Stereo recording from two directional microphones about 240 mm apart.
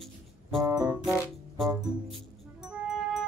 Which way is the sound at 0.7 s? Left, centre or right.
Centre.